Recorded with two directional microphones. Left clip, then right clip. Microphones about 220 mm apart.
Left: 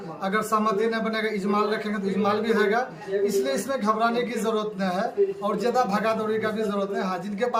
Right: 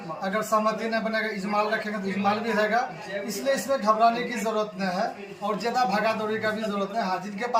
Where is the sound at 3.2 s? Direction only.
20° left (ahead or behind).